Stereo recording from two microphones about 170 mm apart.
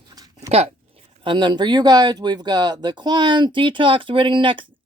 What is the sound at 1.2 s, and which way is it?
Speech, 25° right (ahead or behind).